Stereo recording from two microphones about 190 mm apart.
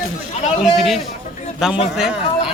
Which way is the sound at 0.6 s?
Centre (ahead or behind).